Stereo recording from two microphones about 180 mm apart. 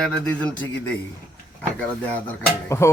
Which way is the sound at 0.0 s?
5° left (ahead or behind).